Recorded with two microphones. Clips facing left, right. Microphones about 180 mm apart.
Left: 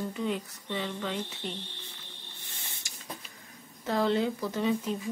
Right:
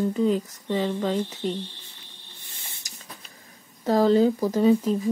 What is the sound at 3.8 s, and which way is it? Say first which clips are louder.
Speech: right 8 dB; 40° right (ahead or behind).